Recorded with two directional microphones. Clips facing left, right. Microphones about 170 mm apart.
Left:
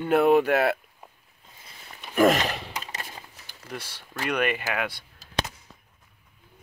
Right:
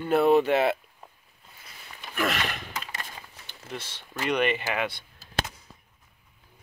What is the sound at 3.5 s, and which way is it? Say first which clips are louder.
Speech: even; 10° left (ahead or behind).